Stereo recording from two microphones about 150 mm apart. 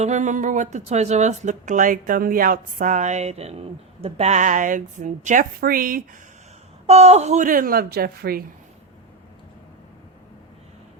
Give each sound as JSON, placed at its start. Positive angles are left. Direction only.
{"t": 0.0, "sound": "a woman's voice", "side_deg": -50}
{"t": 6.8, "sound": "a woman's voice", "side_deg": -45}